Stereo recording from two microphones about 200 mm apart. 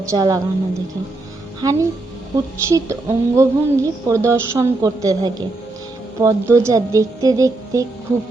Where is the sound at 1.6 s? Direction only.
15° right (ahead or behind).